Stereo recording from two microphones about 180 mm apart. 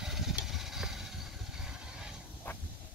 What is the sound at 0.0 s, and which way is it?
Vehicle, centre (ahead or behind).